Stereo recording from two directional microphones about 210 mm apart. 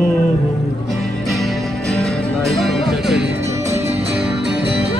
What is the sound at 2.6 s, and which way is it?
Music, centre (ahead or behind).